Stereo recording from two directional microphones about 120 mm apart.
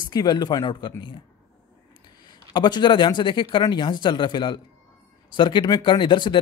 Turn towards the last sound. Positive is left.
turn(degrees=40)  # may be behind; listen again after turning